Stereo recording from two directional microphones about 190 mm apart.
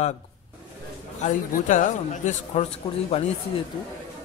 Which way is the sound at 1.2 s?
40° left (ahead or behind).